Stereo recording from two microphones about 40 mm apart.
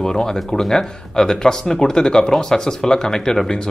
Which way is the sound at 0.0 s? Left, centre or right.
Centre.